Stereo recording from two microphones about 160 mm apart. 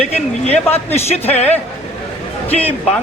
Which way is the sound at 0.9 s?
40° left (ahead or behind).